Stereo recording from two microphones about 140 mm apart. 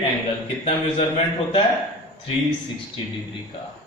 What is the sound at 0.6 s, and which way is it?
A man's voice, 45° left (ahead or behind).